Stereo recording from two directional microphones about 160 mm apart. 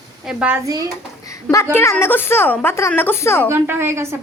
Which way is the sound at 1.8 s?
15° left (ahead or behind).